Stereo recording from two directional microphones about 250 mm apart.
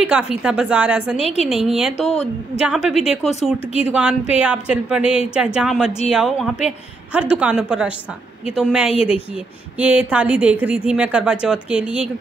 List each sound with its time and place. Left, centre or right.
0.0 s a woman's voice: centre
2.0 s speech: left
2.6 s a woman's voice: centre